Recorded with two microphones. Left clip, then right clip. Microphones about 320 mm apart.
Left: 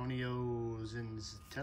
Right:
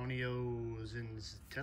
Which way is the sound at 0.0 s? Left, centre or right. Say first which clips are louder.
Even; centre.